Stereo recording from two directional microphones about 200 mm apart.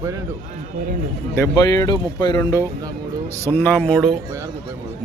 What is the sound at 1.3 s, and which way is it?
Speech, 15° left (ahead or behind).